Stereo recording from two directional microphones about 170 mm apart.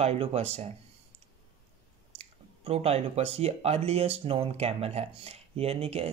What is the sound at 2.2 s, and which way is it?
Speech, 35° right (ahead or behind).